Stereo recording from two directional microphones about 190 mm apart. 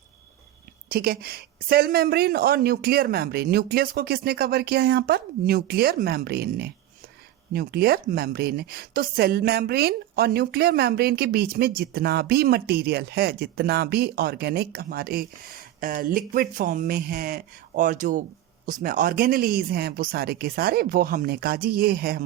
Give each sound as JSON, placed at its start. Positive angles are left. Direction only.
{"t": 0.9, "sound": "a woman's voice", "side_deg": -55}